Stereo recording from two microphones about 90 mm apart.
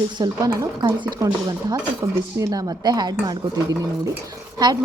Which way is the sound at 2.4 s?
45° right (ahead or behind).